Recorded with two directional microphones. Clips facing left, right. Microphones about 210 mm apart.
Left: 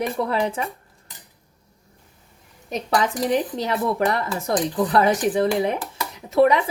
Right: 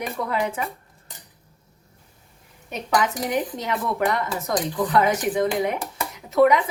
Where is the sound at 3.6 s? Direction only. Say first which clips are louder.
Left 3 dB; 30° left (ahead or behind).